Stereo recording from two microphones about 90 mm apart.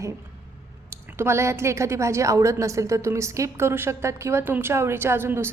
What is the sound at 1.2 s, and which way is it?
A woman's voice, 30° right (ahead or behind).